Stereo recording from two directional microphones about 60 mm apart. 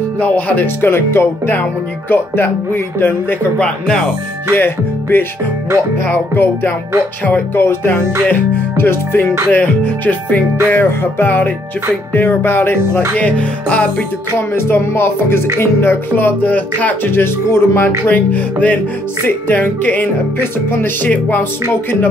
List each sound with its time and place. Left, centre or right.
0.2 s music: left
0.7 s music: left
3.5 s speech: centre
4.6 s music: left
9.5 s music: left
13.2 s music: left
14.5 s music: left
18.0 s music: left